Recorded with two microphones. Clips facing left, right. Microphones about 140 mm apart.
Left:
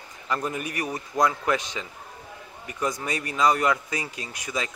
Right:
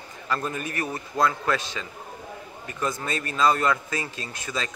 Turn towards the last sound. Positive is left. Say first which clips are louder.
# even
turn(degrees=15)  # may be behind; listen again after turning